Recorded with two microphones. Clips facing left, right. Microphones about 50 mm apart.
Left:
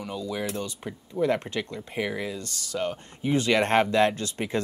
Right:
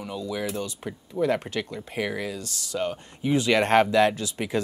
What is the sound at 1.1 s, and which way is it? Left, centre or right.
Speech, centre.